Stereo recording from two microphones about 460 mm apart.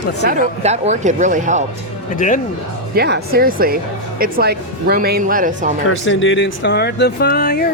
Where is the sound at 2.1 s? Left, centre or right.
Centre.